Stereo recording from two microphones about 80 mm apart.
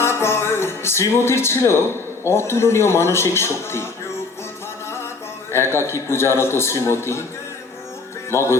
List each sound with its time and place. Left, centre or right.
0.0 s speech: left
5.5 s a man's voice: left
8.3 s music: left